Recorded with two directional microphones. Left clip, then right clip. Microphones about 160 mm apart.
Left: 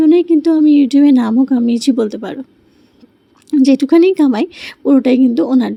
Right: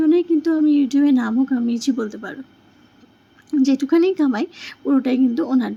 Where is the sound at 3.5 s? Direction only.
35° left (ahead or behind).